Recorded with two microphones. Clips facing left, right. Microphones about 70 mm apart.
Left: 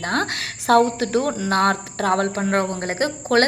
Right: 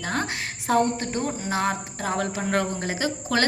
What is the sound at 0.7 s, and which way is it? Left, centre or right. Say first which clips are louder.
A woman's voice: left 6 dB; left.